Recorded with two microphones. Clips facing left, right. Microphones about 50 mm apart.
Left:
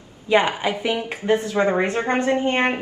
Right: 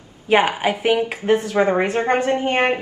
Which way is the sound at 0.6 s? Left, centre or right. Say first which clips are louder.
Right 5 dB; right.